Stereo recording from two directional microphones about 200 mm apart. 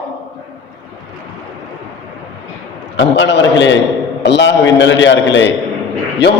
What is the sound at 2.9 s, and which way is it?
A man's voice, 60° left (ahead or behind).